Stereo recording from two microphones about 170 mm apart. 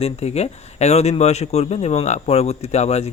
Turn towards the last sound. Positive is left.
turn(degrees=40)  # may be behind; listen again after turning